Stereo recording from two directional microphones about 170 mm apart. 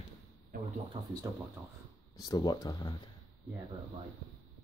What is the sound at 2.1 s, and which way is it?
Speech, 25° left (ahead or behind).